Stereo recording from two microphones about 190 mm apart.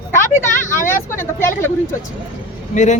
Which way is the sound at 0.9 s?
15° left (ahead or behind).